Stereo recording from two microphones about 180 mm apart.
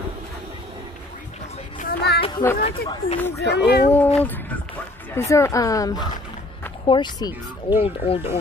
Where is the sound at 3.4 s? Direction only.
65° left (ahead or behind).